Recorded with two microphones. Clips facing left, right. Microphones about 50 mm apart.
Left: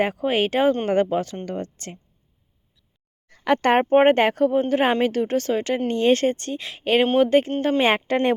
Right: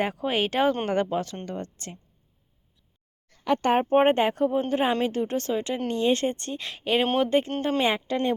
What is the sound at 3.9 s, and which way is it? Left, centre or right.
Speech, left.